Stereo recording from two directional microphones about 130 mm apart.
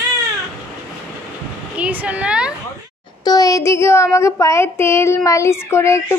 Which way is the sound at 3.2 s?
30° left (ahead or behind).